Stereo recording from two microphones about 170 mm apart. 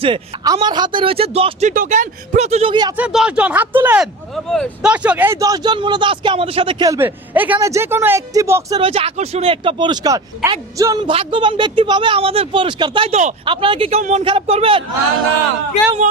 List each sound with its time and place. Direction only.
0.0 s speech: 25° right (ahead or behind)
1.7 s speech: 50° right (ahead or behind); by 2.9 s 30° right (ahead or behind)
2.9 s speech: 5° right (ahead or behind)
4.4 s speech: 5° left (ahead or behind)
4.9 s a woman's voice: 10° right (ahead or behind); by 6.8 s 30° right (ahead or behind)
6.8 s speech: 15° right (ahead or behind)
8.8 s a woman's voice: 35° right (ahead or behind)